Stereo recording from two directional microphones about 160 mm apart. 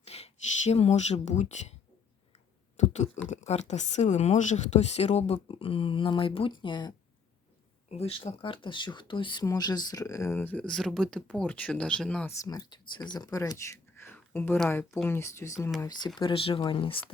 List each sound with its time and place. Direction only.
0.0 s speech: 40° left (ahead or behind)
2.7 s a sound: 45° left (ahead or behind)
3.2 s speech: 45° left (ahead or behind); by 6.9 s 30° left (ahead or behind)
7.9 s speech: 40° left (ahead or behind); by 12.3 s 5° left (ahead or behind)
12.4 s speech: 25° left (ahead or behind)
16.1 s speech: 35° left (ahead or behind)